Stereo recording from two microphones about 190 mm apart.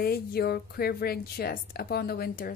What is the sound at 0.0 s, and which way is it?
A woman's voice, 55° left (ahead or behind).